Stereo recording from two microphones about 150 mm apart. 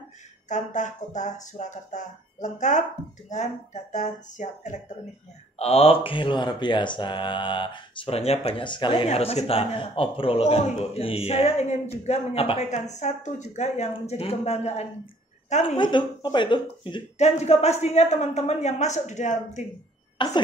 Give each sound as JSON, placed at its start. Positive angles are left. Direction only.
{"t": 0.5, "sound": "speech", "side_deg": 50}
{"t": 5.6, "sound": "speech", "side_deg": 40}
{"t": 15.6, "sound": "speech", "side_deg": 35}
{"t": 17.2, "sound": "speech", "side_deg": 45}
{"t": 20.2, "sound": "speech", "side_deg": 30}